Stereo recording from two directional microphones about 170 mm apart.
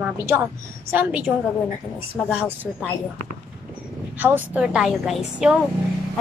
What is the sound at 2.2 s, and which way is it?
Speech, 10° right (ahead or behind).